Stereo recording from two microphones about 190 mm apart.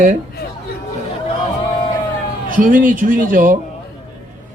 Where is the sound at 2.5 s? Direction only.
45° right (ahead or behind).